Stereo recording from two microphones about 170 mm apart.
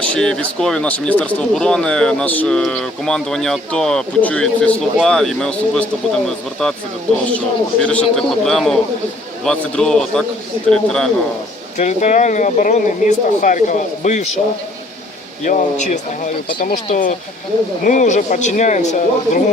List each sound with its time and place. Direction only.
0.0 s speech: 5° left (ahead or behind)
7.3 s speech: 5° left (ahead or behind)
11.8 s speech: 45° left (ahead or behind)
15.5 s speech: 55° left (ahead or behind)